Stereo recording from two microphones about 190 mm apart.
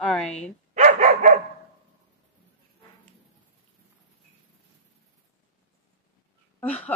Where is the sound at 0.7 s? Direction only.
40° right (ahead or behind).